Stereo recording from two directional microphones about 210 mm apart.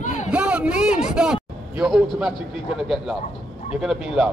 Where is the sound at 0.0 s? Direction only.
35° left (ahead or behind).